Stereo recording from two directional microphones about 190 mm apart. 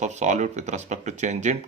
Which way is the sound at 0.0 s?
40° right (ahead or behind).